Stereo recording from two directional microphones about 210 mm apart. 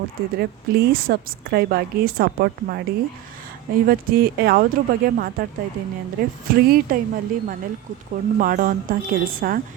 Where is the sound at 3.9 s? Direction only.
45° right (ahead or behind).